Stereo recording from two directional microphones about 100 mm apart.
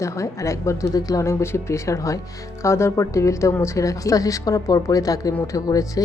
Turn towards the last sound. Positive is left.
turn(degrees=35)  # may be behind; listen again after turning